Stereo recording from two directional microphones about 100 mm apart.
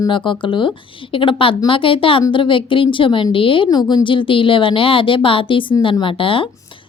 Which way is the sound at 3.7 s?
40° left (ahead or behind).